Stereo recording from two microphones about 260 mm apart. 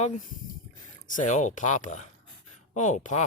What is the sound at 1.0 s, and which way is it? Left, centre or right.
Speech, left.